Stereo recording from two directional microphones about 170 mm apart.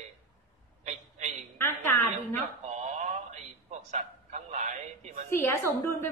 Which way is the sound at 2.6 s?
45° right (ahead or behind).